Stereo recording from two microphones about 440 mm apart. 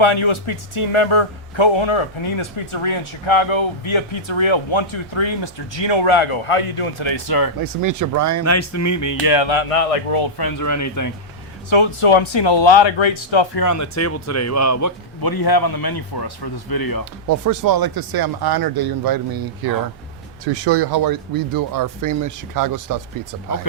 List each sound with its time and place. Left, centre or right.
0.0 s a man's voice: left
7.6 s speech: right
8.4 s music: left
9.3 s speech: left
10.2 s speech: left
10.6 s music: left
11.7 s a man's voice: left
13.6 s speech: left
17.2 s speech: right
20.4 s speech: right